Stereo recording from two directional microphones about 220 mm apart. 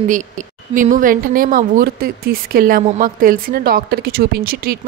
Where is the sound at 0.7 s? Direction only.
35° right (ahead or behind).